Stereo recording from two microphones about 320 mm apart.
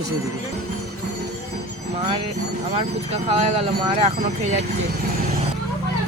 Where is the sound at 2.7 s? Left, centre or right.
Centre.